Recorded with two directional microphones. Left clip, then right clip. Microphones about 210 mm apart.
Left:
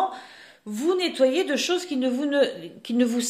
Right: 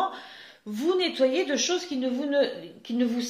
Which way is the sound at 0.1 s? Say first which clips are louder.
Left 1 dB; 20° left (ahead or behind).